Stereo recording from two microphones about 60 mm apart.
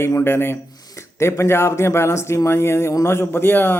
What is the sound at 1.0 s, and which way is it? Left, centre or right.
A man's voice, left.